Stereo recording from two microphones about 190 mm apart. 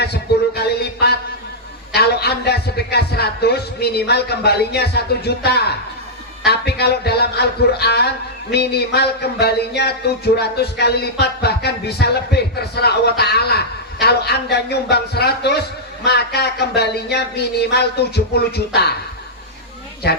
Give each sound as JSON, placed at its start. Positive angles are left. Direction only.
{"t": 0.0, "sound": "a sound", "side_deg": 60}
{"t": 1.9, "sound": "a man's voice", "side_deg": 60}
{"t": 20.0, "sound": "speech", "side_deg": 55}